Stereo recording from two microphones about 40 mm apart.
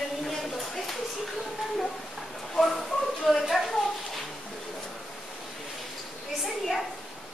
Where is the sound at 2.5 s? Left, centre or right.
Centre.